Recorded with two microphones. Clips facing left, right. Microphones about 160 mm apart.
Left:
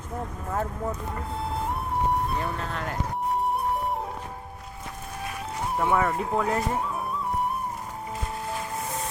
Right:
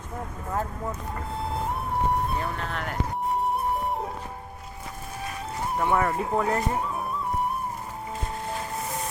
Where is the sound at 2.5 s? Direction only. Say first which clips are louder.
Even; 25° left (ahead or behind).